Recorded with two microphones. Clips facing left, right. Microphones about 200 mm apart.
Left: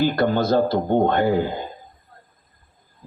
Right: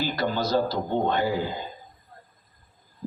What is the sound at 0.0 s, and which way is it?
Speech, 55° left (ahead or behind).